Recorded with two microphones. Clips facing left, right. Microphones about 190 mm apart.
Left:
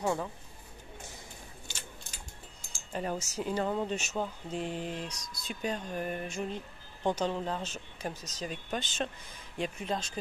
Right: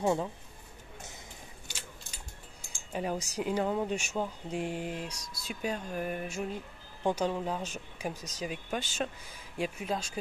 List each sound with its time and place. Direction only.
0.0 s speech: 20° right (ahead or behind)
2.9 s speech: 10° right (ahead or behind)